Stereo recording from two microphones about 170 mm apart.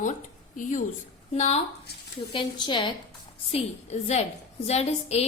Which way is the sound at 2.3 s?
30° left (ahead or behind).